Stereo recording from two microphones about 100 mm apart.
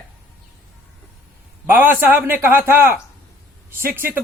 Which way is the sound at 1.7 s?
20° right (ahead or behind).